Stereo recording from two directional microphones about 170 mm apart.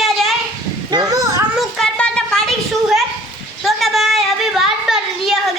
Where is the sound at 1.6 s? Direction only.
Centre (ahead or behind).